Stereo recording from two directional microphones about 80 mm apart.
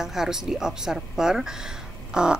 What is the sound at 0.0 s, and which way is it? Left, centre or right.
Speech, centre.